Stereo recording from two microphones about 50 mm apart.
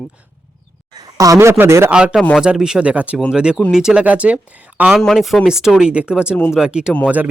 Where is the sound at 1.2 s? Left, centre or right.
Right.